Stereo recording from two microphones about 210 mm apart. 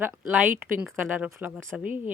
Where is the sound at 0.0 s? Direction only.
10° right (ahead or behind).